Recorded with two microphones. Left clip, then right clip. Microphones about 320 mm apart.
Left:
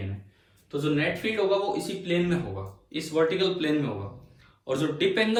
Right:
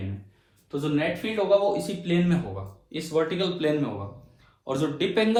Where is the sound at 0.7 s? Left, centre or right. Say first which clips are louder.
Even; centre.